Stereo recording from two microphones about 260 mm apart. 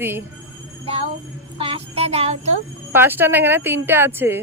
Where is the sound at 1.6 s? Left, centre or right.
Right.